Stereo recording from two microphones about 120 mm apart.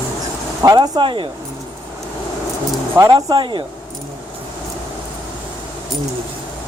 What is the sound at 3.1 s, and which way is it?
Speech, 40° right (ahead or behind).